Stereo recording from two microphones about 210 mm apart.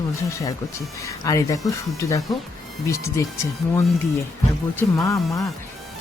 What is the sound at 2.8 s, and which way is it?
Speech, 15° left (ahead or behind).